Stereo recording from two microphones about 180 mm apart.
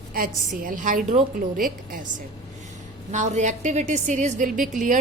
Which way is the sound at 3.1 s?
40° right (ahead or behind).